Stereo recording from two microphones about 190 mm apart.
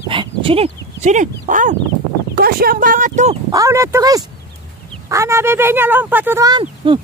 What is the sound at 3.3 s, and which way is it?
Speech, 15° right (ahead or behind).